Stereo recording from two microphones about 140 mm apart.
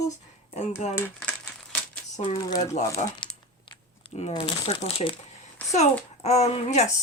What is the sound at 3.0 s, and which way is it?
Speech, 55° left (ahead or behind).